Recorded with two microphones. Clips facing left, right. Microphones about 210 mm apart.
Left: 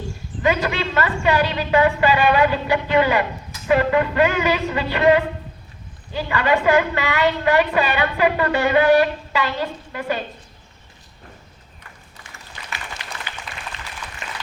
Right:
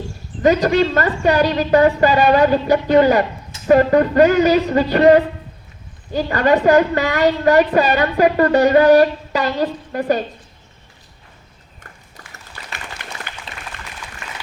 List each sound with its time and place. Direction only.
0.4 s a woman's voice: 40° right (ahead or behind)
13.0 s applause: 55° right (ahead or behind)
14.2 s applause: 20° left (ahead or behind)